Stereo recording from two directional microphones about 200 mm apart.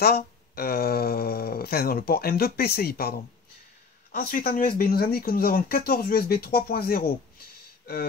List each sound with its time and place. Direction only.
0.0 s speech: 50° left (ahead or behind)